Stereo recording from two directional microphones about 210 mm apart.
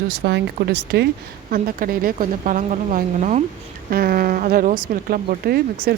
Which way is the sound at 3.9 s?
45° right (ahead or behind).